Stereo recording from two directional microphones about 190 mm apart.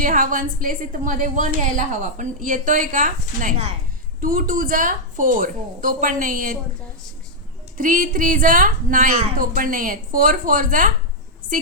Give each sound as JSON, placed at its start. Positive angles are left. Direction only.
{"t": 0.0, "sound": "a woman's voice", "side_deg": -45}
{"t": 7.8, "sound": "a woman's voice", "side_deg": -45}